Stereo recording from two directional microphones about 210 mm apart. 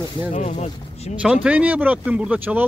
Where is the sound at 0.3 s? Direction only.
35° left (ahead or behind).